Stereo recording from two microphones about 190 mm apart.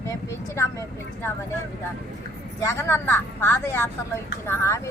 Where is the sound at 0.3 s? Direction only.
15° left (ahead or behind).